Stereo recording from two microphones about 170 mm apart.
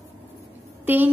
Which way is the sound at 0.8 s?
10° right (ahead or behind).